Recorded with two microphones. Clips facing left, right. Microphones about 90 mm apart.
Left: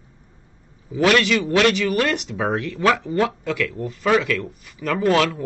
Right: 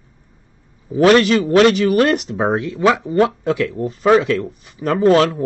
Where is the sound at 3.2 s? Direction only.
30° right (ahead or behind).